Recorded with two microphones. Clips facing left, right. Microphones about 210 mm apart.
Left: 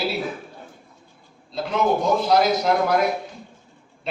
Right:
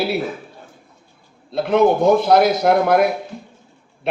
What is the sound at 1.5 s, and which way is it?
Speech, 60° right (ahead or behind).